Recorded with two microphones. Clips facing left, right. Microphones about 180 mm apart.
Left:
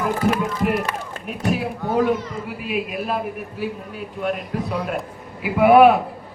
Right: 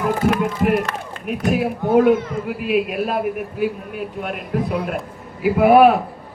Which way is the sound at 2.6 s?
55° right (ahead or behind).